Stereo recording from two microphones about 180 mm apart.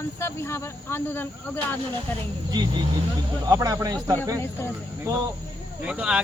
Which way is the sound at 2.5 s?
25° right (ahead or behind).